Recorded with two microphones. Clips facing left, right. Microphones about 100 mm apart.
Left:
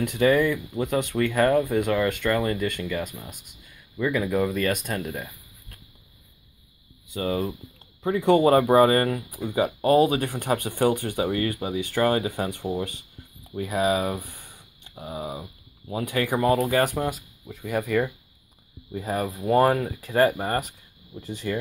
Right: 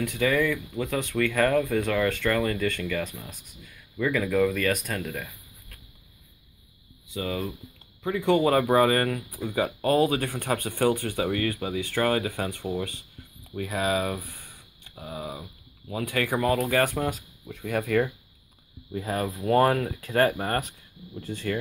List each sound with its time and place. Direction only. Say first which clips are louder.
0.2 s speech: left 4 dB; 30° left (ahead or behind)
7.2 s speech: left 4 dB; 35° left (ahead or behind)
9.4 s speech: left 3 dB; 15° left (ahead or behind)